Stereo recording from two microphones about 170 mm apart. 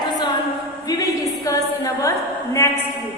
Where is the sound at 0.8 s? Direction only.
20° left (ahead or behind).